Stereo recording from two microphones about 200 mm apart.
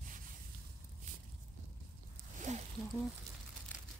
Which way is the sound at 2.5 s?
35° right (ahead or behind).